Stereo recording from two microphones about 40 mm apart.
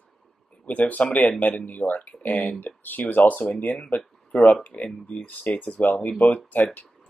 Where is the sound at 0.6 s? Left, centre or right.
Left.